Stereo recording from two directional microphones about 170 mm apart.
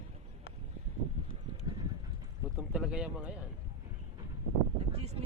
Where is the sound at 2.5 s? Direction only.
5° right (ahead or behind).